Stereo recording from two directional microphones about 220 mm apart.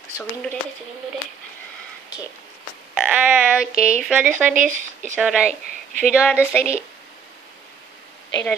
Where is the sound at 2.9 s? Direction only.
5° right (ahead or behind).